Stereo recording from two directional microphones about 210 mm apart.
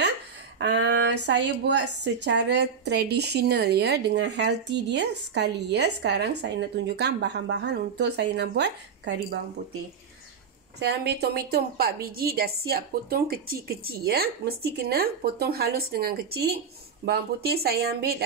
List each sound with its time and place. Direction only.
0.6 s a woman's voice: 55° right (ahead or behind)
10.8 s a woman's voice: 50° right (ahead or behind)